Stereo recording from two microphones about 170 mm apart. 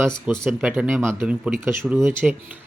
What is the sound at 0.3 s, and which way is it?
Speech, 5° right (ahead or behind).